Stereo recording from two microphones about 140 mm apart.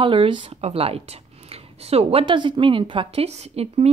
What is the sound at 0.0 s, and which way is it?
Speech, 35° right (ahead or behind).